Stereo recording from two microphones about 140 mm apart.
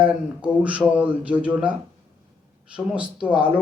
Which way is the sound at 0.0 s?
10° right (ahead or behind).